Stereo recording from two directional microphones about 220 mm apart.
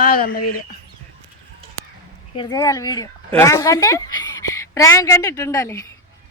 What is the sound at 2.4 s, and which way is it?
A woman's voice, 15° left (ahead or behind).